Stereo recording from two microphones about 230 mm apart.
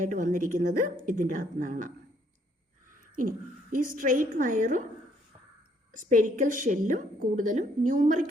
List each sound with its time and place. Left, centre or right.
0.0 s a woman's voice: right
3.0 s a woman's voice: right
5.9 s a woman's voice: right